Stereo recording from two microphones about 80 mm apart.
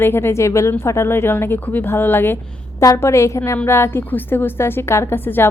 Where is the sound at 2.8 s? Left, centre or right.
Left.